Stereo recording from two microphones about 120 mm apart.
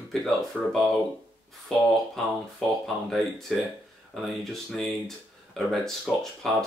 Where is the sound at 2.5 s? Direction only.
Centre (ahead or behind).